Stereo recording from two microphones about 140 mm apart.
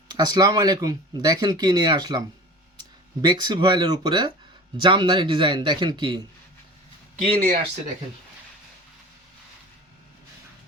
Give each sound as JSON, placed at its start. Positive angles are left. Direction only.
{"t": 0.1, "sound": "speech", "side_deg": -30}
{"t": 7.3, "sound": "speech", "side_deg": -90}